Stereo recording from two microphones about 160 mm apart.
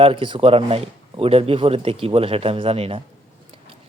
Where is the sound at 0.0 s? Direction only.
35° right (ahead or behind).